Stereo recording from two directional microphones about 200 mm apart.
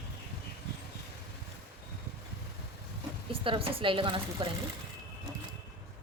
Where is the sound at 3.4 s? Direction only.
25° right (ahead or behind).